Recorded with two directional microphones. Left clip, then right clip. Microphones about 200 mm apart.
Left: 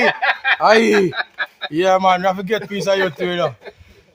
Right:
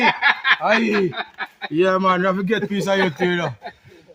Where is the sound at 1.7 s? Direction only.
15° left (ahead or behind).